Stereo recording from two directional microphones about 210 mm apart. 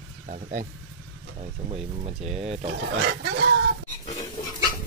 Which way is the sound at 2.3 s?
30° right (ahead or behind).